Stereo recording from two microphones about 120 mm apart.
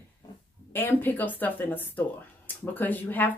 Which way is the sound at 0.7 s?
15° left (ahead or behind).